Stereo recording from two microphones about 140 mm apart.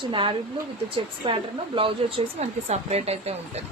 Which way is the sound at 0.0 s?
35° right (ahead or behind).